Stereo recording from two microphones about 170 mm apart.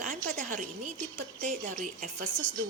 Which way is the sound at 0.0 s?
50° right (ahead or behind).